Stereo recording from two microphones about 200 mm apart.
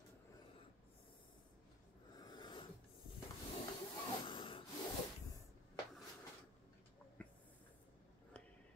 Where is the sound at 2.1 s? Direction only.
20° left (ahead or behind).